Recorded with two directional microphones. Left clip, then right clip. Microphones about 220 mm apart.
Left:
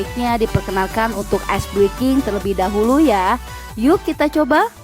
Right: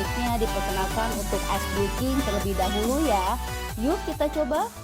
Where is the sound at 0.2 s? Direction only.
45° left (ahead or behind).